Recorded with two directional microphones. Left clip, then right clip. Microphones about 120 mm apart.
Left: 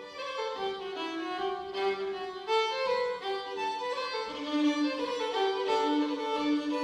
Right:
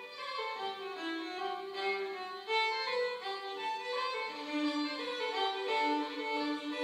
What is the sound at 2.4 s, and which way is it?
Music, 30° left (ahead or behind).